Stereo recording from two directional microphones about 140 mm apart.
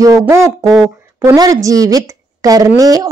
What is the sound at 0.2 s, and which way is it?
A woman's voice, 20° right (ahead or behind).